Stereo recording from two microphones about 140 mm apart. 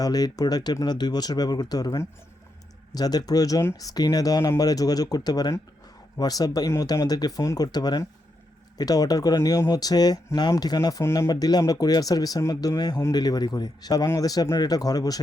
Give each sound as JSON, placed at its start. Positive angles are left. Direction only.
{"t": 0.0, "sound": "speech", "side_deg": 25}